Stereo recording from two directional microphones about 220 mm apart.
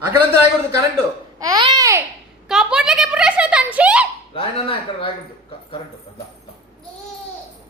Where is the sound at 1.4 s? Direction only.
20° right (ahead or behind).